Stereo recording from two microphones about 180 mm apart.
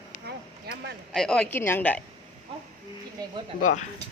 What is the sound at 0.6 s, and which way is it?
Speech, 70° right (ahead or behind).